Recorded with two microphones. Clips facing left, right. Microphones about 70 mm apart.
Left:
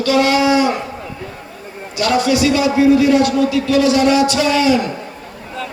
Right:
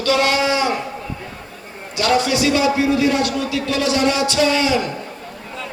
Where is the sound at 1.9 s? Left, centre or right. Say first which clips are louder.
Left 1 dB; left.